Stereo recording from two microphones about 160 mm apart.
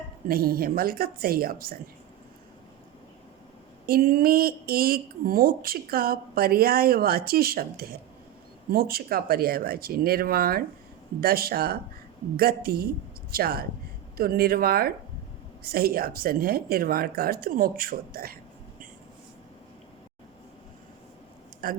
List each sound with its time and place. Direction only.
0.3 s speech: 70° right (ahead or behind)
3.8 s speech: 65° right (ahead or behind)
21.6 s speech: 60° right (ahead or behind)